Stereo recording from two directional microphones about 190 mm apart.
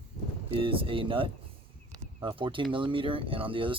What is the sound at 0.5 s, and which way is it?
Speech, 30° right (ahead or behind).